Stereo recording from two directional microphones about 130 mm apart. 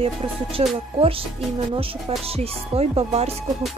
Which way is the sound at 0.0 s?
45° right (ahead or behind).